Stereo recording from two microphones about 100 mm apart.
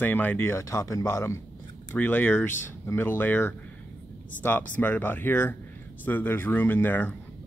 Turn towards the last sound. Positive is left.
turn(degrees=15)  # may be behind; listen again after turning